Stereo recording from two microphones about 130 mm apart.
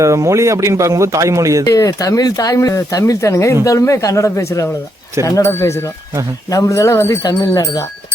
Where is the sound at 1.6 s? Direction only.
25° left (ahead or behind).